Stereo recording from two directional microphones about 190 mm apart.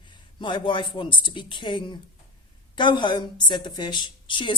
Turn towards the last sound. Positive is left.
turn(degrees=25)  # may be behind; listen again after turning